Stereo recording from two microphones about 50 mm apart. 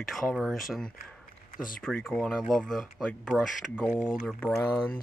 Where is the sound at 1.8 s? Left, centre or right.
Centre.